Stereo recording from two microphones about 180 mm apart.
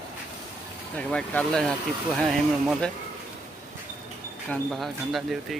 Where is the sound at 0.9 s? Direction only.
5° left (ahead or behind).